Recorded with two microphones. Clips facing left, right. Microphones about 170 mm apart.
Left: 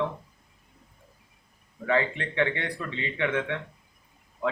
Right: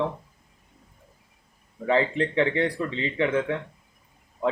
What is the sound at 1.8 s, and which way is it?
A man's voice, 30° right (ahead or behind).